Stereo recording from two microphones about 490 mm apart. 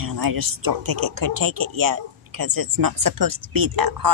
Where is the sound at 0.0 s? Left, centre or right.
Right.